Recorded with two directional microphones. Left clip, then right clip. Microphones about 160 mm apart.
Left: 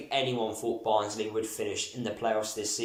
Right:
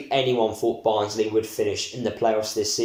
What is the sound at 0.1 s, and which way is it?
Speech, 35° right (ahead or behind).